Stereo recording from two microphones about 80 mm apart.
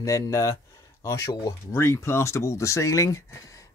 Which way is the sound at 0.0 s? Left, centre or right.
Left.